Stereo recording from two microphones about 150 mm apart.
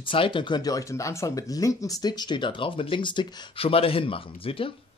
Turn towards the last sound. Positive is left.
turn(degrees=40)  # may be behind; listen again after turning